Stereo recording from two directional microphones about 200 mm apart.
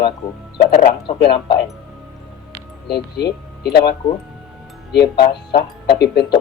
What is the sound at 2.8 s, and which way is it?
Speech, 55° left (ahead or behind).